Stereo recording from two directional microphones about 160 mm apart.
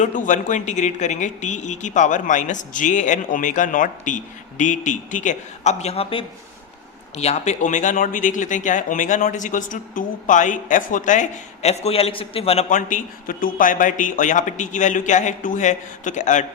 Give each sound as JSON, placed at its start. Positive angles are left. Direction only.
{"t": 0.0, "sound": "speech", "side_deg": 50}
{"t": 12.7, "sound": "speech", "side_deg": 55}